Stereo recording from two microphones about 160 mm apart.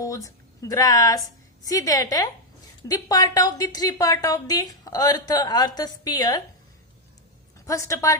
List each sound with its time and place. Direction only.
0.0 s a woman's voice: 20° left (ahead or behind)
7.6 s a woman's voice: 20° left (ahead or behind)